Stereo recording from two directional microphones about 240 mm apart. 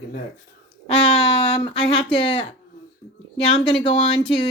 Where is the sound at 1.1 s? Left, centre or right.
Left.